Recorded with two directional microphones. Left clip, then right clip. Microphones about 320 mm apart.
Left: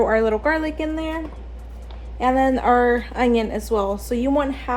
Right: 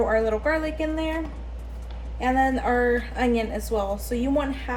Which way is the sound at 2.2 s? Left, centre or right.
Left.